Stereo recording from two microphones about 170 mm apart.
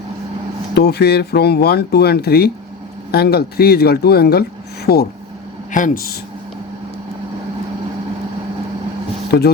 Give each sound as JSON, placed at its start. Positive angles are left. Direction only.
{"t": 0.7, "sound": "speech", "side_deg": 75}
{"t": 5.7, "sound": "speech", "side_deg": 55}